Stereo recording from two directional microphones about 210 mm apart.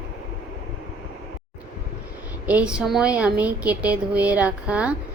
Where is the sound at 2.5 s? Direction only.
5° right (ahead or behind).